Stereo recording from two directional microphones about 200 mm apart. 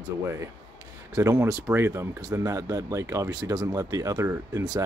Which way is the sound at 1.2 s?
15° right (ahead or behind).